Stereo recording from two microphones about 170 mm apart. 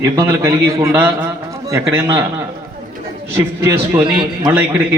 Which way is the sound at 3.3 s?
15° right (ahead or behind).